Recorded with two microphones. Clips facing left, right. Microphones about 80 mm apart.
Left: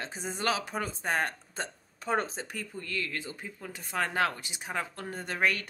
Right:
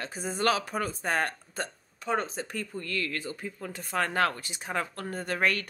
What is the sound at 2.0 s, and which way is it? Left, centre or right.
Speech, left.